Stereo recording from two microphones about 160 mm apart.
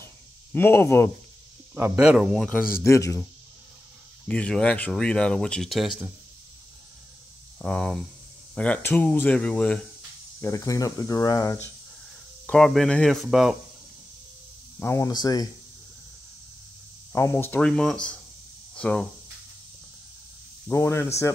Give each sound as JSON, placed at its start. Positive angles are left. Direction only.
{"t": 0.0, "sound": "a sound", "side_deg": 15}
{"t": 2.0, "sound": "speech", "side_deg": -5}
{"t": 2.7, "sound": "speech", "side_deg": 15}
{"t": 4.3, "sound": "speech", "side_deg": 5}
{"t": 7.5, "sound": "speech", "side_deg": 5}
{"t": 10.4, "sound": "speech", "side_deg": 20}
{"t": 12.4, "sound": "speech", "side_deg": 5}
{"t": 14.8, "sound": "speech", "side_deg": 20}
{"t": 17.1, "sound": "speech", "side_deg": 15}
{"t": 20.6, "sound": "speech", "side_deg": 15}